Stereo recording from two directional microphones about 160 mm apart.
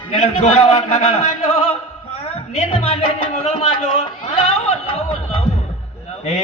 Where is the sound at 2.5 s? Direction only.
45° left (ahead or behind).